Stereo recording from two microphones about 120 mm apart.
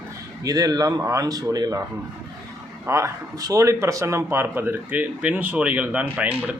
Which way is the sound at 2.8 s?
25° right (ahead or behind).